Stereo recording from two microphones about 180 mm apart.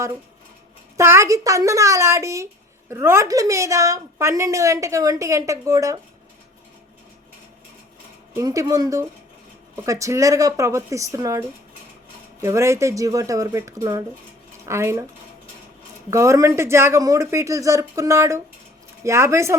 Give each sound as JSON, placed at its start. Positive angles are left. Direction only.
{"t": 0.9, "sound": "a woman's voice", "side_deg": -15}
{"t": 8.3, "sound": "a woman's voice", "side_deg": -20}
{"t": 16.0, "sound": "a woman's voice", "side_deg": -15}